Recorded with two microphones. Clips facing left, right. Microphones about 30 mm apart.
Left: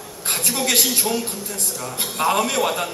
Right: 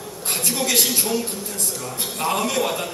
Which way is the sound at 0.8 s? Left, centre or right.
Centre.